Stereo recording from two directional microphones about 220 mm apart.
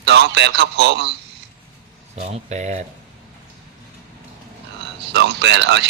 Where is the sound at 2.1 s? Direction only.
30° right (ahead or behind).